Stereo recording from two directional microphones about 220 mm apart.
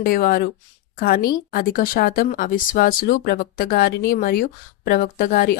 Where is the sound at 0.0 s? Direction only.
40° left (ahead or behind).